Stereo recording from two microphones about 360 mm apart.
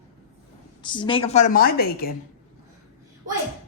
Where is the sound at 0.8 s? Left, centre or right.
Centre.